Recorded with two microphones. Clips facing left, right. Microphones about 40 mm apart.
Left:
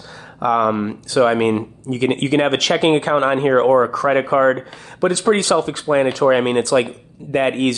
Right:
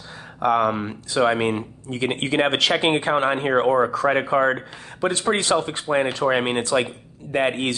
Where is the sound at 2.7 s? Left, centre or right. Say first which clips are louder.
Left 4 dB; centre.